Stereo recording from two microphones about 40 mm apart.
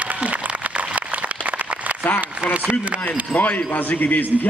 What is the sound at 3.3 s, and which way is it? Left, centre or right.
Speech, left.